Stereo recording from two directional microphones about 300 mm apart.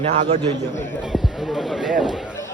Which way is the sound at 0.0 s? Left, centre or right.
Right.